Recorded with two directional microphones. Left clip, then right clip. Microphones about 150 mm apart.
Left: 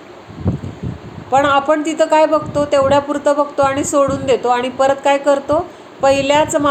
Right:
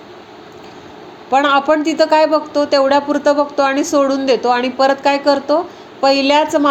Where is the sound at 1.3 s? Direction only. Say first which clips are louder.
Even; 45° right (ahead or behind).